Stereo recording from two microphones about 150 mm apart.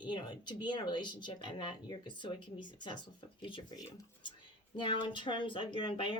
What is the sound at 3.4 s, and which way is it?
A woman's voice, 35° left (ahead or behind).